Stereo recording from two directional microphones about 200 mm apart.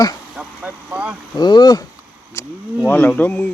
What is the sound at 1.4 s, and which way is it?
Speech, 20° left (ahead or behind).